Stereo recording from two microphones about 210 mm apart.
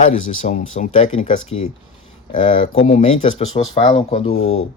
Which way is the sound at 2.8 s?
30° left (ahead or behind).